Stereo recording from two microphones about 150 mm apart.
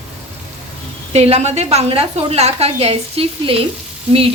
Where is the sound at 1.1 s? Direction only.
45° right (ahead or behind).